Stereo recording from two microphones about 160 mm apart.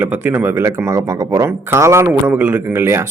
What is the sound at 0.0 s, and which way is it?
Speech, 15° right (ahead or behind).